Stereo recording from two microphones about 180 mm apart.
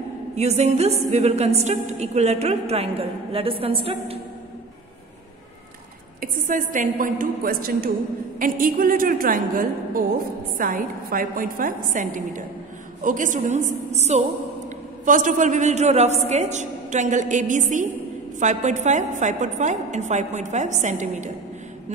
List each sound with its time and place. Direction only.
0.4 s a woman's voice: 40° right (ahead or behind)
6.2 s a woman's voice: 50° right (ahead or behind)